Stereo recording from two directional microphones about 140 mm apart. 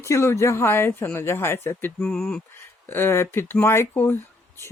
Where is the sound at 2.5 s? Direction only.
15° left (ahead or behind).